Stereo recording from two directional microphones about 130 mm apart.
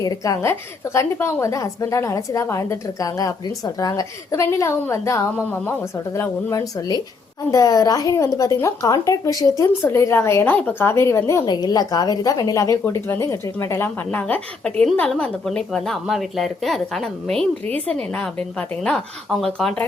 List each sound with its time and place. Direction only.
0.0 s a woman's voice: 25° left (ahead or behind)
11.4 s a woman's voice: 30° left (ahead or behind); by 19.8 s 5° left (ahead or behind)